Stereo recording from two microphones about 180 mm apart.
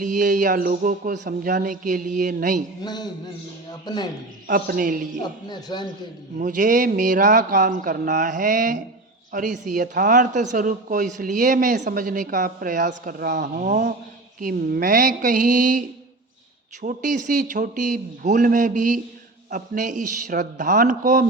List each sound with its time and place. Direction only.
0.0 s speech: 45° right (ahead or behind)
2.8 s a man's voice: 20° left (ahead or behind)
4.4 s speech: 55° right (ahead or behind)
5.5 s a man's voice: 25° left (ahead or behind)
6.4 s speech: 45° right (ahead or behind)
16.8 s speech: 45° right (ahead or behind)